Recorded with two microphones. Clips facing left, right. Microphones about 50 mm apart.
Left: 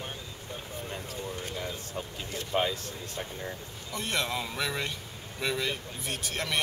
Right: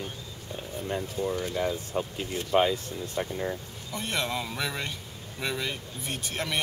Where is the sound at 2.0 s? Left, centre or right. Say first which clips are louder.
Right 6 dB; right.